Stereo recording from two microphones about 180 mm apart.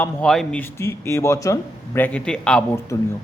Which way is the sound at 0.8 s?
15° left (ahead or behind).